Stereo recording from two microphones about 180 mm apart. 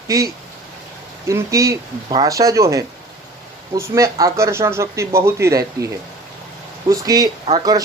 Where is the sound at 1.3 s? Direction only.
15° right (ahead or behind).